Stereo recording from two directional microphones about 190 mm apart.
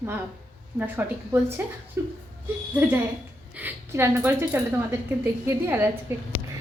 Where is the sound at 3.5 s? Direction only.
10° right (ahead or behind).